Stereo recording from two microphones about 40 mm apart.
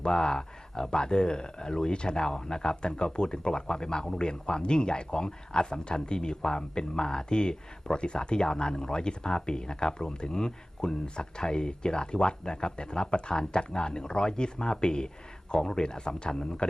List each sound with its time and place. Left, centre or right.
0.0 s speech: centre